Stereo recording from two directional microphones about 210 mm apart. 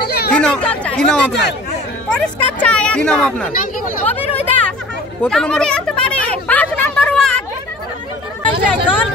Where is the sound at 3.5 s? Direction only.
40° left (ahead or behind).